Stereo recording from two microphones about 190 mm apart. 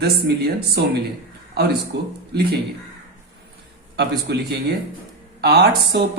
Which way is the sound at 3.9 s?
60° right (ahead or behind).